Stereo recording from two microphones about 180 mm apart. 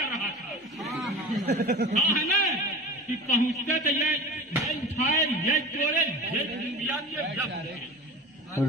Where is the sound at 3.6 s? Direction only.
40° left (ahead or behind).